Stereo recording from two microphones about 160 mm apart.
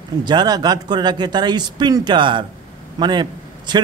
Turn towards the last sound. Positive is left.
turn(degrees=-25)  # may be behind; listen again after turning